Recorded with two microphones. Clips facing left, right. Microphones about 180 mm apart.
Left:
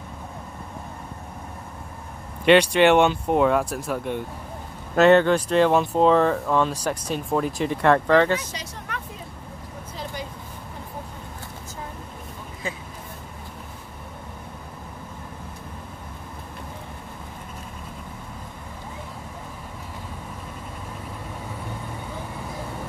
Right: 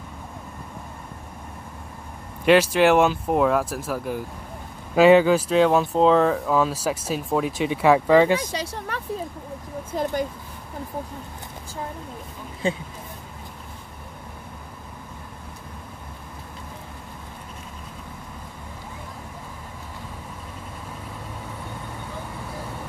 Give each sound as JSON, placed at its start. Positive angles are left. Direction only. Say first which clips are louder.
{"t": 2.4, "sound": "speech", "louder": "left 1 dB", "side_deg": -5}
{"t": 8.5, "sound": "speech", "louder": "right 5 dB", "side_deg": -35}
{"t": 9.9, "sound": "speech", "louder": "right 10 dB", "side_deg": -50}
{"t": 12.6, "sound": "speech", "louder": "right 8 dB", "side_deg": -30}